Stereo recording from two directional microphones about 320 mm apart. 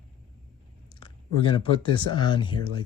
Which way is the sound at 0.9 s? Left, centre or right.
Centre.